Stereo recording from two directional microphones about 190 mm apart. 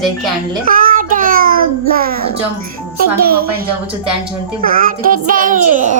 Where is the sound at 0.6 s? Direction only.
45° right (ahead or behind).